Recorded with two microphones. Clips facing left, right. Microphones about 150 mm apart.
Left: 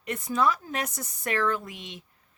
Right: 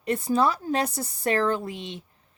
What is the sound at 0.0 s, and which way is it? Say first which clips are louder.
Speech: right 3 dB; 30° right (ahead or behind).